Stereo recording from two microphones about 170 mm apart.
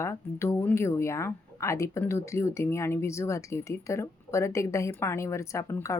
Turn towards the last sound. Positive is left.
turn(degrees=15)  # may be behind; listen again after turning